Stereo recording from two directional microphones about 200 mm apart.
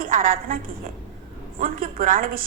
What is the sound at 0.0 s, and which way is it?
Speech, 45° right (ahead or behind).